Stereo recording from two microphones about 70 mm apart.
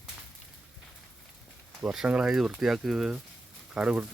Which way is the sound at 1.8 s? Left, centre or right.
Centre.